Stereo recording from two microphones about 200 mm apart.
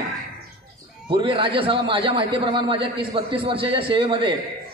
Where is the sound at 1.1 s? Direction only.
25° right (ahead or behind).